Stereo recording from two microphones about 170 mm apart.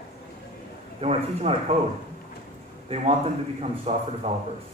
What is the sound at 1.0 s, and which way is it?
Speech, 35° right (ahead or behind).